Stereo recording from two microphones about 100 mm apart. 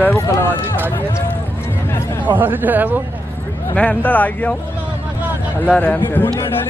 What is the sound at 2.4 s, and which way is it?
Speech, 20° right (ahead or behind).